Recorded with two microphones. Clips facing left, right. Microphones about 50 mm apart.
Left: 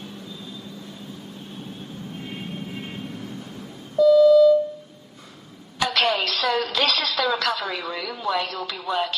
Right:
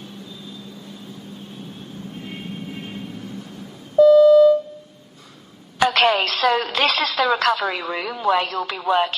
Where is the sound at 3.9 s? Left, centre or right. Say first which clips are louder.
Right 3 dB; right.